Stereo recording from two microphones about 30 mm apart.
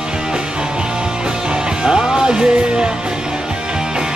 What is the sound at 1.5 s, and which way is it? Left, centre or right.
Music, right.